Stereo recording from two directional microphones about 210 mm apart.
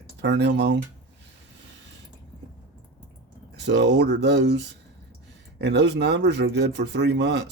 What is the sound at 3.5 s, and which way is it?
Speech, 55° right (ahead or behind).